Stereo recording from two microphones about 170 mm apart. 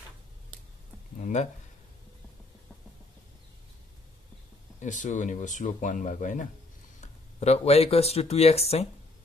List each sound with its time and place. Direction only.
1.2 s speech: 40° left (ahead or behind)
4.7 s speech: 45° left (ahead or behind)